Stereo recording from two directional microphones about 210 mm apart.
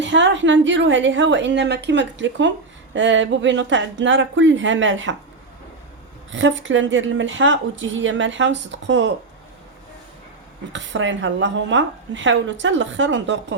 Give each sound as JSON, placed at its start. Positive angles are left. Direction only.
{"t": 0.0, "sound": "a woman's voice", "side_deg": -60}
{"t": 6.3, "sound": "a woman's voice", "side_deg": -65}
{"t": 10.7, "sound": "a woman's voice", "side_deg": -60}